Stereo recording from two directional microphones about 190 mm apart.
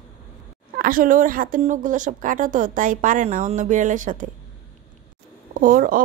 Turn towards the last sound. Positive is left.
turn(degrees=-45)  # may be behind; listen again after turning